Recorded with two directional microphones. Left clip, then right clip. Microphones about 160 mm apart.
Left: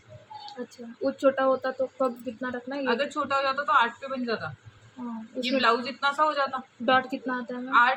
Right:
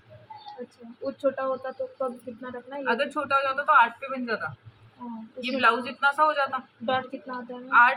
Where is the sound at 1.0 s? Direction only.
65° left (ahead or behind).